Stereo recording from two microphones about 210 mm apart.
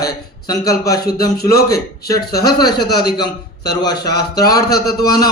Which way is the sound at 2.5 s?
20° left (ahead or behind).